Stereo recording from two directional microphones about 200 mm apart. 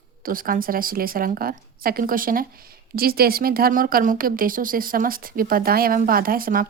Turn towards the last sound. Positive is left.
turn(degrees=-45)  # may be behind; listen again after turning